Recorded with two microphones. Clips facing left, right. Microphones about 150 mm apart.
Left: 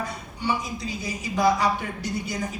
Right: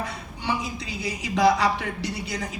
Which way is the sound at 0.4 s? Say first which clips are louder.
Left 1 dB; 70° right (ahead or behind).